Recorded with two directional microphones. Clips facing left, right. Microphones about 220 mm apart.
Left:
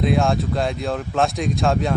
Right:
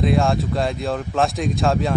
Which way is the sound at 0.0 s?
Centre (ahead or behind).